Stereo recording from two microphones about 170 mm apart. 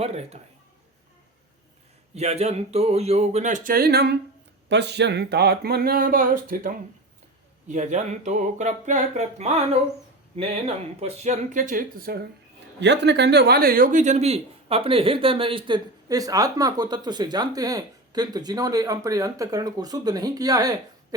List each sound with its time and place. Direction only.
0.0 s speech: 40° right (ahead or behind)
2.1 s speech: 40° right (ahead or behind); by 4.2 s 75° right (ahead or behind)
4.7 s speech: 90° right; by 12.3 s 65° right (ahead or behind)
12.8 s speech: 90° right; by 21.2 s 20° right (ahead or behind)